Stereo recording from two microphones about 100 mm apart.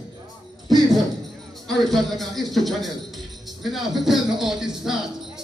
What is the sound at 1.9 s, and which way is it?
Speech, centre (ahead or behind).